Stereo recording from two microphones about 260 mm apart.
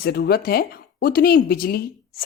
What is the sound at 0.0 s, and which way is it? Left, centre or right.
A woman's voice, left.